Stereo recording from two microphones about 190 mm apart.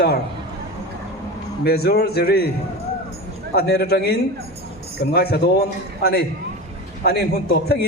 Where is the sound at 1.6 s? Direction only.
55° left (ahead or behind).